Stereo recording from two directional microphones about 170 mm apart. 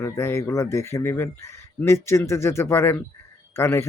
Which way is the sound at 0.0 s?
15° left (ahead or behind).